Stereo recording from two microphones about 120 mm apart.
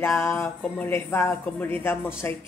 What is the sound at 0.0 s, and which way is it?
A woman's voice, 20° left (ahead or behind).